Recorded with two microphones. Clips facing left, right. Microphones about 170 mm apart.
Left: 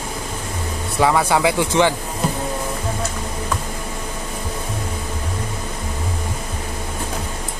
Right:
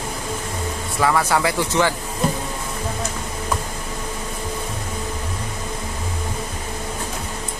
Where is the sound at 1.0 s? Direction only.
20° left (ahead or behind).